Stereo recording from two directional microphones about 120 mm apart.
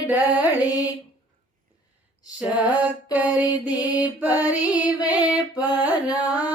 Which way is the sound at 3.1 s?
15° right (ahead or behind).